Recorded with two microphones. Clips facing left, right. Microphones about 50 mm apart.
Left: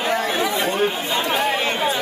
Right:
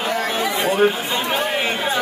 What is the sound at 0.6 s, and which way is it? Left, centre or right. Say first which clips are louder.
Chatter: right 3 dB; centre.